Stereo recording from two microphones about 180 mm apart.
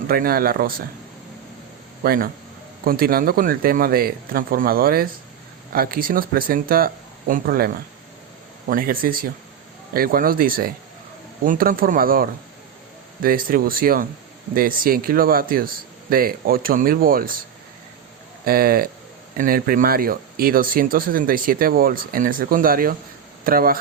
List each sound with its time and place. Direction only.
0.1 s speech: 55° right (ahead or behind)
2.0 s speech: 55° right (ahead or behind)
18.4 s speech: 55° right (ahead or behind)